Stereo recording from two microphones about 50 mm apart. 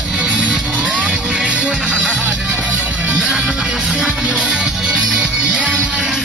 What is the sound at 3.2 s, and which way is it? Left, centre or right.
Music, centre.